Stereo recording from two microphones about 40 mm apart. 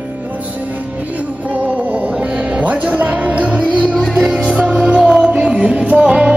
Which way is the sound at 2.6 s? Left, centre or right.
Right.